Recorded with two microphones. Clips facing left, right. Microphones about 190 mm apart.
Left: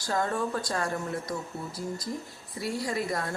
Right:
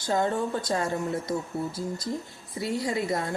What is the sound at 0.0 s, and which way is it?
Speech, 20° right (ahead or behind).